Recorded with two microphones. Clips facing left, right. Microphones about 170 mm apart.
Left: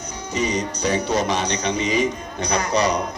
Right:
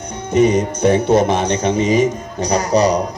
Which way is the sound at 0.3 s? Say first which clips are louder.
Right 10 dB; 55° right (ahead or behind).